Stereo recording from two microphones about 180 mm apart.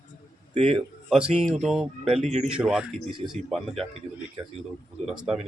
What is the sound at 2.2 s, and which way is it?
Speech, 35° right (ahead or behind).